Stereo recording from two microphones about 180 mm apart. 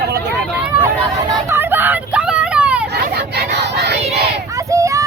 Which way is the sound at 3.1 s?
65° right (ahead or behind).